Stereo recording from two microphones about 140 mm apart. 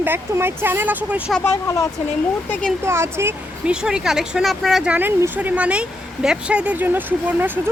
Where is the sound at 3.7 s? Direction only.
5° right (ahead or behind).